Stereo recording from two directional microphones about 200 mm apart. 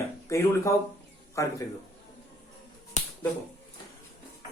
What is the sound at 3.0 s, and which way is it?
Finger snapping, 35° left (ahead or behind).